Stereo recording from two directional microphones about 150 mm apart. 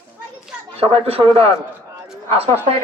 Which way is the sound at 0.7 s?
40° right (ahead or behind).